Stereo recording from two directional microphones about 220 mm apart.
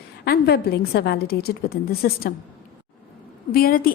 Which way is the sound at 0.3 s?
45° left (ahead or behind).